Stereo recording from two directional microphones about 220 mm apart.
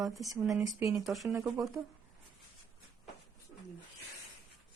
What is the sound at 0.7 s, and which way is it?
Speech, 15° right (ahead or behind).